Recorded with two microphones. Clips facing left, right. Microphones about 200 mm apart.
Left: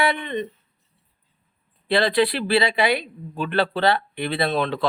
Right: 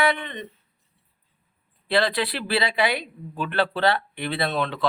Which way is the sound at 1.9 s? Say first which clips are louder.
Left 4 dB; 25° left (ahead or behind).